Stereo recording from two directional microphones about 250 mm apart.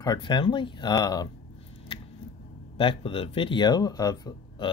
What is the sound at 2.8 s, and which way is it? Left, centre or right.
Speech, left.